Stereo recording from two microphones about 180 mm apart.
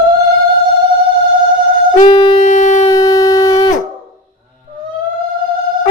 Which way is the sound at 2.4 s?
45° left (ahead or behind).